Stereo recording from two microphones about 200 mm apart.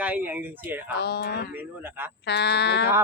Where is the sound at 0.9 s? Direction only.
55° left (ahead or behind).